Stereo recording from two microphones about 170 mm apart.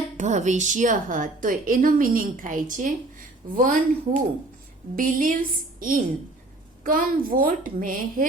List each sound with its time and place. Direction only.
0.2 s a woman's voice: 45° right (ahead or behind)